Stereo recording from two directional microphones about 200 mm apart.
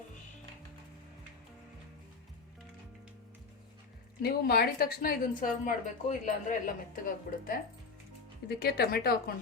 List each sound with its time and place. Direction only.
4.2 s a woman's voice: 50° left (ahead or behind)